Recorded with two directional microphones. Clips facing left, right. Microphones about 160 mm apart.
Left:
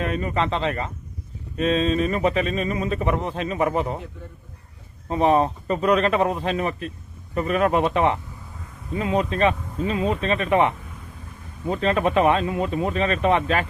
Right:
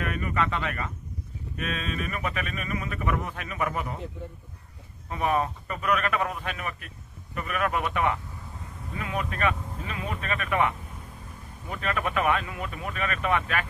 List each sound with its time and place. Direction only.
0.0 s speech: 25° left (ahead or behind)
5.1 s speech: 30° left (ahead or behind)